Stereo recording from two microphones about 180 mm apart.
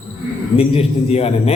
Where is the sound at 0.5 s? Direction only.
35° left (ahead or behind).